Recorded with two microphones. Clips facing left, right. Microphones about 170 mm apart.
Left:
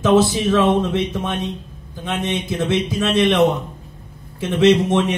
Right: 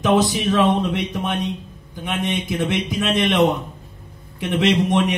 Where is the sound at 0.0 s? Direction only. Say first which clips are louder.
Left 3 dB; 15° right (ahead or behind).